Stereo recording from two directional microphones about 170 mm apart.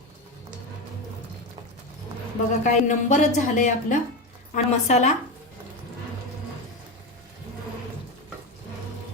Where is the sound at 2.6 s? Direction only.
45° left (ahead or behind).